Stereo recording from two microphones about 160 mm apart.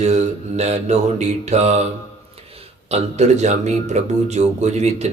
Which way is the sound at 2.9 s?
40° right (ahead or behind).